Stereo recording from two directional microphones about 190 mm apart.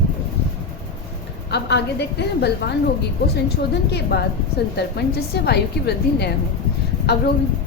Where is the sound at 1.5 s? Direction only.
60° left (ahead or behind).